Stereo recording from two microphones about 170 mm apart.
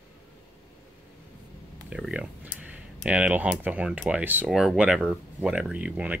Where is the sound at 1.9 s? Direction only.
5° right (ahead or behind).